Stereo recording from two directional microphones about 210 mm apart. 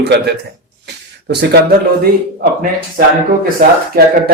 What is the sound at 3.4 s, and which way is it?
Speech, 45° right (ahead or behind).